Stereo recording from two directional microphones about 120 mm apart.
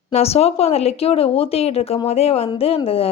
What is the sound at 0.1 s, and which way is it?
Speech, 60° left (ahead or behind).